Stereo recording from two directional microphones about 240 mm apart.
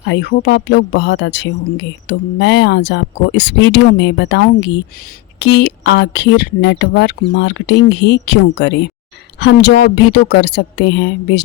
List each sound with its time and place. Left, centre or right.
0.0 s speech: left